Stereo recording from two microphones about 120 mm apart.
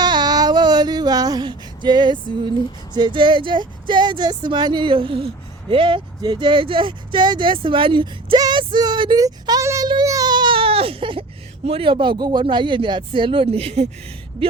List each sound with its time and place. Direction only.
0.0 s female singing: 35° right (ahead or behind)
2.9 s speech: 40° right (ahead or behind)
9.2 s a sound: 25° right (ahead or behind)
9.9 s baby cry: 30° right (ahead or behind); by 13.8 s 60° right (ahead or behind)